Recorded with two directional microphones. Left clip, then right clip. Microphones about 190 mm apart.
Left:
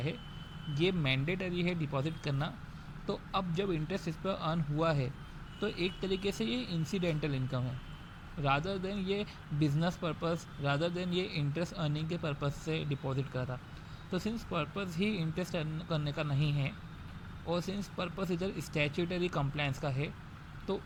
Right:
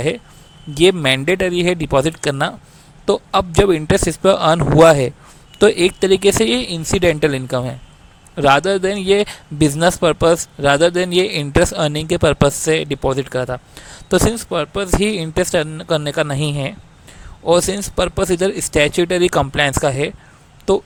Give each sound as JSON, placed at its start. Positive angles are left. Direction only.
{"t": 0.7, "sound": "speech", "side_deg": -50}